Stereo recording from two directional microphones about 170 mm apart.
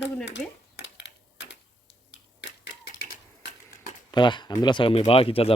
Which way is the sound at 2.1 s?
90° left.